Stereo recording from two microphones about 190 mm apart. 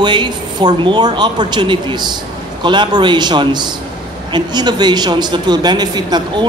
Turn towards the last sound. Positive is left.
turn(degrees=-20)  # may be behind; listen again after turning